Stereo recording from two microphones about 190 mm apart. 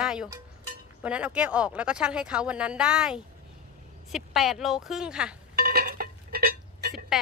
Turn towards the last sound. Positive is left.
turn(degrees=-55)  # may be behind; listen again after turning